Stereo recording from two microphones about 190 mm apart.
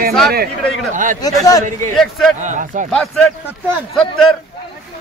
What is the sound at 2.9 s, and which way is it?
Speech, 5° left (ahead or behind).